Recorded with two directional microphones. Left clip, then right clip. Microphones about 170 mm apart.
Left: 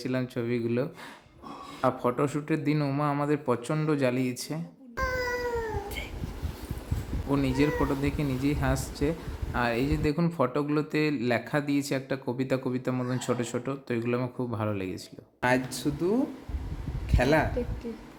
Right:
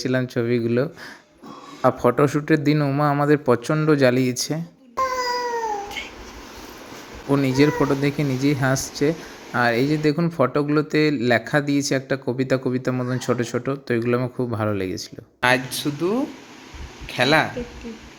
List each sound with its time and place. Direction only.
0.0 s speech: 25° right (ahead or behind)
7.3 s speech: 25° right (ahead or behind)
14.9 s speech: 5° right (ahead or behind)